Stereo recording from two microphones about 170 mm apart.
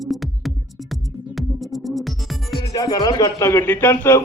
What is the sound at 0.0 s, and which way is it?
Music, centre (ahead or behind).